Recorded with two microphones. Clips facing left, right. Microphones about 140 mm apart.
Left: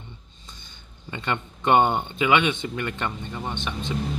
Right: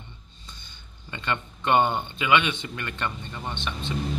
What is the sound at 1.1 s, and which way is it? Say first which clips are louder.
Speech: left 2 dB; 15° left (ahead or behind).